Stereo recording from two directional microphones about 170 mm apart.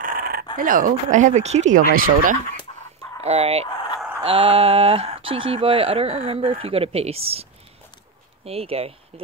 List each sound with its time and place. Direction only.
0.0 s a sound: 55° right (ahead or behind)
0.6 s speech: 55° right (ahead or behind)
3.2 s speech: 35° right (ahead or behind)
8.5 s speech: 35° right (ahead or behind)